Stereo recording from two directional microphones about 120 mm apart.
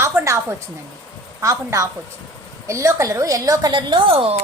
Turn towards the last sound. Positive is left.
turn(degrees=-55)  # may be behind; listen again after turning